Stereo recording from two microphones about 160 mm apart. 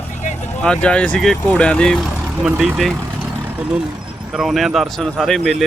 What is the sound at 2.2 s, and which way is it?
Vehicle, 5° right (ahead or behind).